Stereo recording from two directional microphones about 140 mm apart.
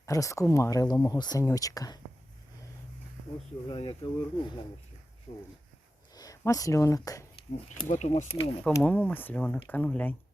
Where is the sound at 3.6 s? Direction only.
40° left (ahead or behind).